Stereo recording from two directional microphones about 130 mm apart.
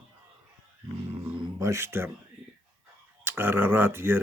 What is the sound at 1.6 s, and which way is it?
Speech, 20° right (ahead or behind).